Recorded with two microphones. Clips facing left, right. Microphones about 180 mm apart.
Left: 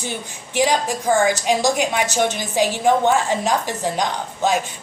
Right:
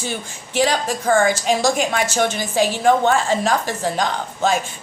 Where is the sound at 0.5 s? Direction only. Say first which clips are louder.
Even; 15° left (ahead or behind).